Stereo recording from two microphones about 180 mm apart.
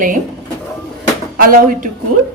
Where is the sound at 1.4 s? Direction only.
50° right (ahead or behind).